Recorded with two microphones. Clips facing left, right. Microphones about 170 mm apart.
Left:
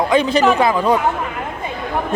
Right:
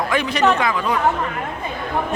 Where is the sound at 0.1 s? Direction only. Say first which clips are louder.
Left 3 dB; 25° left (ahead or behind).